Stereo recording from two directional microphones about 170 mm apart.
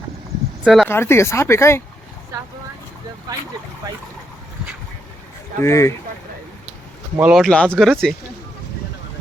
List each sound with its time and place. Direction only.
0.6 s speech: centre (ahead or behind)
0.9 s speech: 15° left (ahead or behind)
3.3 s speech: 20° right (ahead or behind)
5.6 s speech: 15° left (ahead or behind)
7.2 s speech: 5° right (ahead or behind)